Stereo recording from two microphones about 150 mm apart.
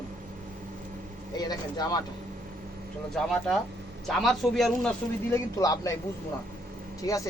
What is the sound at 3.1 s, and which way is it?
Speech, 5° left (ahead or behind).